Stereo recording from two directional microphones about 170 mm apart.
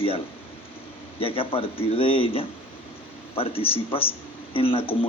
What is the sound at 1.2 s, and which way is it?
A man's voice, 35° left (ahead or behind).